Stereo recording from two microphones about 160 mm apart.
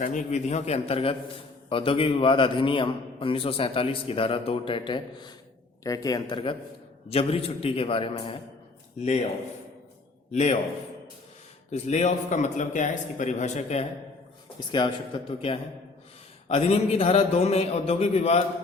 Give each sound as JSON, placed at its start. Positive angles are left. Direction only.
{"t": 0.0, "sound": "a man's voice", "side_deg": 50}
{"t": 9.0, "sound": "a man's voice", "side_deg": 45}
{"t": 10.3, "sound": "a man's voice", "side_deg": 45}
{"t": 11.7, "sound": "a man's voice", "side_deg": 45}
{"t": 14.7, "sound": "a man's voice", "side_deg": 30}